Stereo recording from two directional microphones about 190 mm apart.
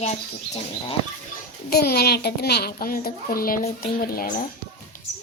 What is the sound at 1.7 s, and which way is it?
A child's voice, 55° left (ahead or behind).